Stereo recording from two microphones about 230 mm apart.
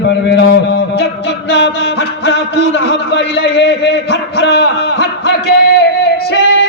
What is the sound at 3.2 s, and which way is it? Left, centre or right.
Music, left.